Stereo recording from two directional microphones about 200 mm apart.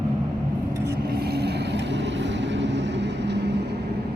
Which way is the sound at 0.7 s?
15° right (ahead or behind).